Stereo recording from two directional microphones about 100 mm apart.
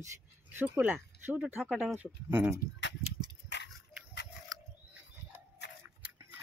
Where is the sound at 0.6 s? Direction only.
15° right (ahead or behind).